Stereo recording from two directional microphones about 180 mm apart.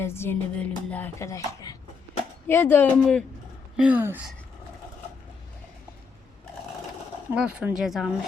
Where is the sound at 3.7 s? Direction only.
10° right (ahead or behind).